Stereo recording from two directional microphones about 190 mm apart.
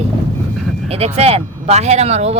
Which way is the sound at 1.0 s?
30° right (ahead or behind).